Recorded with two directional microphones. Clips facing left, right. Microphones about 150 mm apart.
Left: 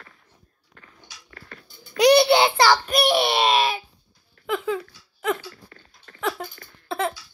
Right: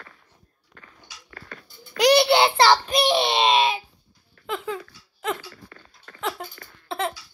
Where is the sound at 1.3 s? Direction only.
90° right.